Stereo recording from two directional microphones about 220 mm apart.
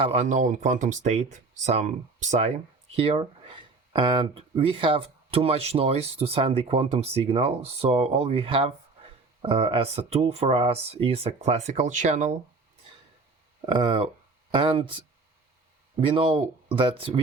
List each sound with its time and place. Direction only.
0.0 s speech: 30° right (ahead or behind)
13.7 s speech: 20° right (ahead or behind)